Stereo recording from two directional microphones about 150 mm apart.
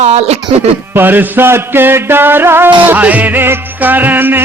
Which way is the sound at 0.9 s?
15° right (ahead or behind).